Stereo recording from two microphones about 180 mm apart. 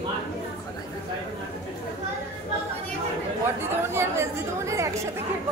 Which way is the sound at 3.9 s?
15° right (ahead or behind).